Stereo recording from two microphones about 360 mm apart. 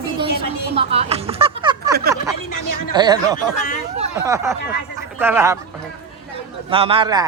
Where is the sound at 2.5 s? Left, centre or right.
Left.